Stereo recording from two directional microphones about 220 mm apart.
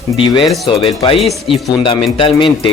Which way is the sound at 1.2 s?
Centre (ahead or behind).